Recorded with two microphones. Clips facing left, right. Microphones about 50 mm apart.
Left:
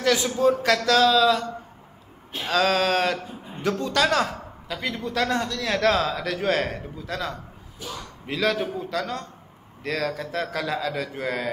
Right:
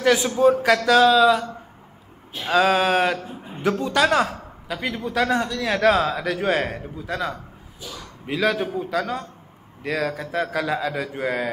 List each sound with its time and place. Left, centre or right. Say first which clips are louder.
0.0 s a man's voice: right 3 dB; centre